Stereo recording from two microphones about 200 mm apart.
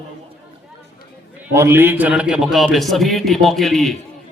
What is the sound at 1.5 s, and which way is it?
A man's voice, 15° right (ahead or behind).